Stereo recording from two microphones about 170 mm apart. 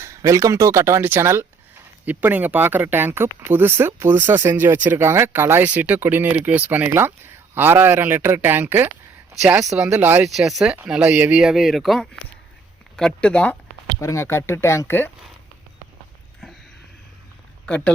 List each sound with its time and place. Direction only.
0.0 s speech: 15° right (ahead or behind); by 13.6 s 5° left (ahead or behind)
14.0 s speech: 15° left (ahead or behind)
17.7 s speech: 10° left (ahead or behind)